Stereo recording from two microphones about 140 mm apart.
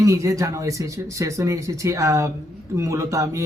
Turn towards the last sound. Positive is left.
turn(degrees=-20)  # may be behind; listen again after turning